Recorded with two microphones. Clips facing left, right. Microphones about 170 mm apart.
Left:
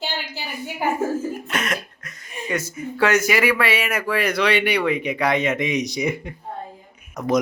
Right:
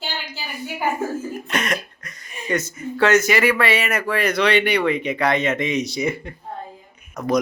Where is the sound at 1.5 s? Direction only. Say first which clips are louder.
Right 2 dB; 5° left (ahead or behind).